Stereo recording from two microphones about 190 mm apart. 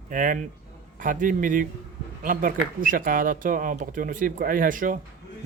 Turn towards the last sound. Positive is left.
turn(degrees=-45)  # may be behind; listen again after turning